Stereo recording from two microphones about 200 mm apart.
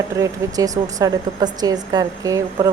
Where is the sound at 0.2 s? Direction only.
15° right (ahead or behind).